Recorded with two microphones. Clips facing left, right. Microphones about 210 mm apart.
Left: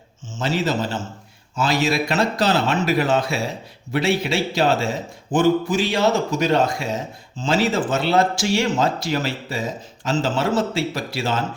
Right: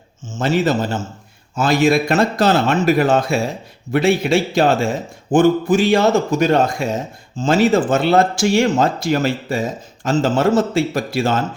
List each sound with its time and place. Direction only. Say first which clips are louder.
0.3 s speech: right 5 dB; 50° right (ahead or behind)